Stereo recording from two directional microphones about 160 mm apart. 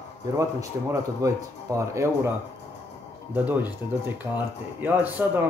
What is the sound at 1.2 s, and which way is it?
Speech, 20° right (ahead or behind).